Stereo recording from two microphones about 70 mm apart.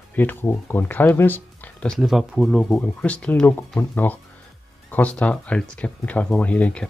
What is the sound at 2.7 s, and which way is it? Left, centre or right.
Speech, centre.